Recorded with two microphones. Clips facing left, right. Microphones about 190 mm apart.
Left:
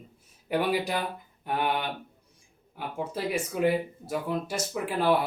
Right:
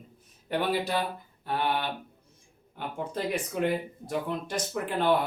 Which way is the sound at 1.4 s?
15° left (ahead or behind).